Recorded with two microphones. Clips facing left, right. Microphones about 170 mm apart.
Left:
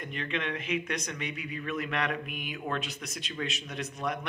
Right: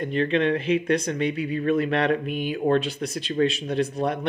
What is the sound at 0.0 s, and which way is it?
Speech, 35° right (ahead or behind).